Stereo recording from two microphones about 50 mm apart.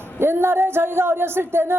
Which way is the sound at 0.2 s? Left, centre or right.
Right.